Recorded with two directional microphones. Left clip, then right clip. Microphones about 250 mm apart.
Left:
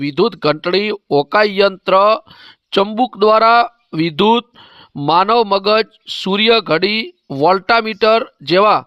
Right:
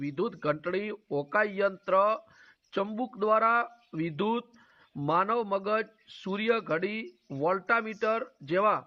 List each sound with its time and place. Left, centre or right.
0.0 s speech: left